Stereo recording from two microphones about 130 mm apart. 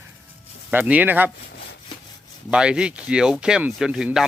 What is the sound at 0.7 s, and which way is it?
Speech, 15° right (ahead or behind).